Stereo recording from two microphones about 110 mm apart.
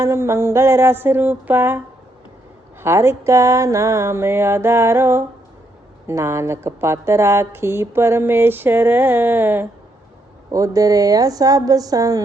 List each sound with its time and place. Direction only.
0.0 s speech: 25° right (ahead or behind)
2.8 s speech: 25° right (ahead or behind)
10.5 s speech: 30° right (ahead or behind)